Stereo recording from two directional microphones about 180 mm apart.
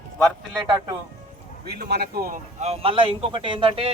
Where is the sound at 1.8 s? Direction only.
60° right (ahead or behind).